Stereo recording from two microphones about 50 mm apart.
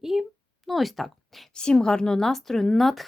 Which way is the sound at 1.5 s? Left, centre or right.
Centre.